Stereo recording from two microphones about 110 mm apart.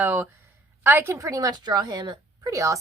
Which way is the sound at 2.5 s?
30° right (ahead or behind).